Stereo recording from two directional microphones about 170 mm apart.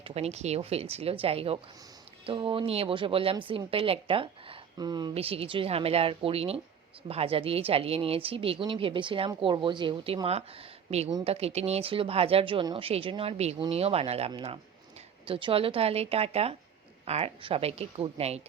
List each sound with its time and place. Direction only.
0.0 s speech: 40° right (ahead or behind)
5.1 s speech: 35° right (ahead or behind)